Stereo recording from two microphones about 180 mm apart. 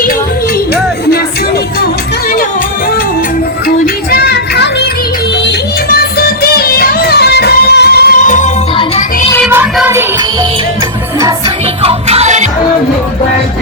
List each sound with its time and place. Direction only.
3.8 s music: 60° left (ahead or behind)
9.7 s music: 10° right (ahead or behind)
11.2 s music: 20° right (ahead or behind)
11.9 s music: 35° right (ahead or behind)